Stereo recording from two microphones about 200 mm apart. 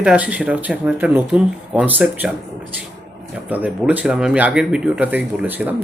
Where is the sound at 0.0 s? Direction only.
5° right (ahead or behind).